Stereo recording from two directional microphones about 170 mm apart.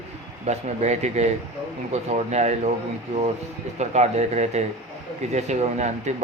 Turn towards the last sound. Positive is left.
turn(degrees=-40)  # may be behind; listen again after turning